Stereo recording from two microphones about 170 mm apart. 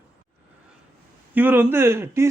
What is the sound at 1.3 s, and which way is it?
Speech, 10° right (ahead or behind).